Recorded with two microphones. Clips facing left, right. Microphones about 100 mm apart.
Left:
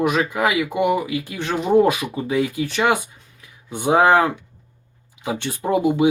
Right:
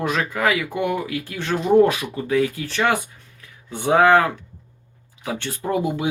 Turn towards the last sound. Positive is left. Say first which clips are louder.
# left 4 dB
turn(degrees=20)  # may be behind; listen again after turning